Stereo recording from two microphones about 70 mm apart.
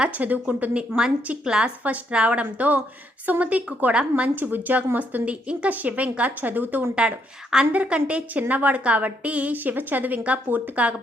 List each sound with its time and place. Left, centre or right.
0.0 s a woman's voice: right